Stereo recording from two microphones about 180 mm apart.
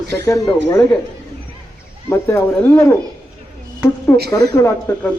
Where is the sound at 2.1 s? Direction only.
15° left (ahead or behind).